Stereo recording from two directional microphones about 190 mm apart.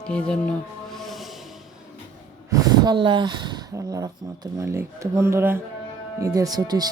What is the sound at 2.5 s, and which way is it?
Speech, 20° right (ahead or behind).